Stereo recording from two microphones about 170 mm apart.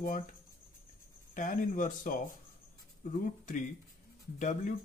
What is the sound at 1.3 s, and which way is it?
Speech, 50° left (ahead or behind).